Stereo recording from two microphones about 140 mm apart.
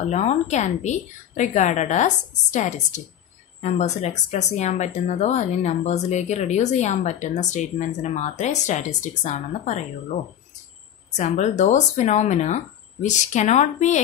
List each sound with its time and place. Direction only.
0.1 s speech: 55° left (ahead or behind)
11.1 s speech: 55° left (ahead or behind)